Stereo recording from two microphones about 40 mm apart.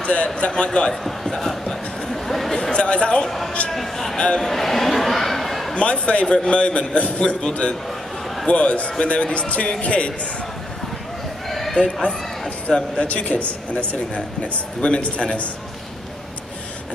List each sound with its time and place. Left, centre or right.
0.0 s a man's voice: left
1.0 s a sound: centre
2.7 s speech: left
3.7 s speech: centre
4.4 s a sound: centre
5.8 s a man's voice: left
11.4 s horse: centre
11.7 s a man's voice: left